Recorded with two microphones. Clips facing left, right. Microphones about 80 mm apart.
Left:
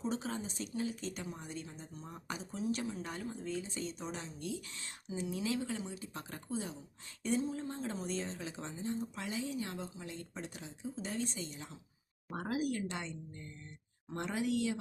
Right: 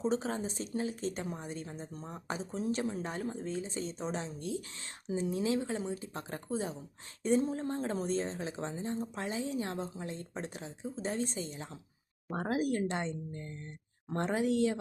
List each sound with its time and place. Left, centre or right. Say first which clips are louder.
0.0 s speech: right 5 dB; right